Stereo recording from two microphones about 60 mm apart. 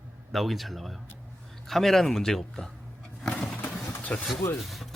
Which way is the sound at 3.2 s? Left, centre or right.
Centre.